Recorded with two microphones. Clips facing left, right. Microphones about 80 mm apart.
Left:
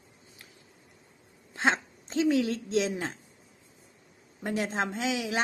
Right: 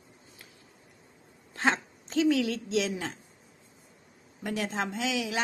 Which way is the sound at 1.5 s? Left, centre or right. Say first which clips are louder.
Left 1 dB; left.